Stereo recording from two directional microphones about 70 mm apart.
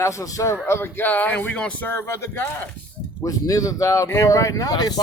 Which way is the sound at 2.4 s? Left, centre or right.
Left.